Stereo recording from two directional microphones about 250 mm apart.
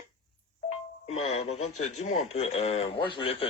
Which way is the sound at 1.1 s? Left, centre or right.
Left.